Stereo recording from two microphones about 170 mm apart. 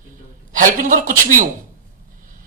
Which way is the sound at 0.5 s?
50° right (ahead or behind).